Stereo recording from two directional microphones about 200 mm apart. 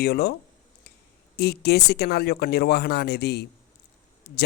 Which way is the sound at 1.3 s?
55° left (ahead or behind).